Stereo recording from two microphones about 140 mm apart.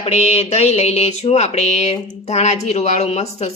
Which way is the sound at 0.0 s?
50° left (ahead or behind).